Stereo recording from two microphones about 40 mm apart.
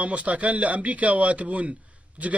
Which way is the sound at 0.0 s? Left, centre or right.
Right.